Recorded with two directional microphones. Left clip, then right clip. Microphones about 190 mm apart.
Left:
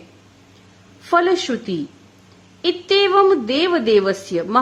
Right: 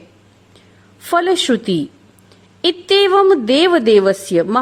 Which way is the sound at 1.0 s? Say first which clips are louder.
Right 2 dB; 35° right (ahead or behind).